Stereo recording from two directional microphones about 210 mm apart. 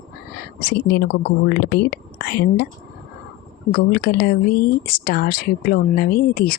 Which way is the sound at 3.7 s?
45° left (ahead or behind).